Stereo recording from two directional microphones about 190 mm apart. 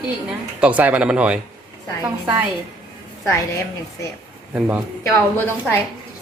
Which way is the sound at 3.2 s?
15° left (ahead or behind).